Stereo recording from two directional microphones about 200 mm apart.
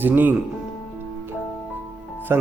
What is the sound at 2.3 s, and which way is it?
Speech, 15° right (ahead or behind).